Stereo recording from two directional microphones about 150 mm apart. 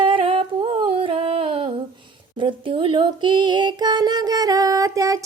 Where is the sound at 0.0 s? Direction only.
35° right (ahead or behind).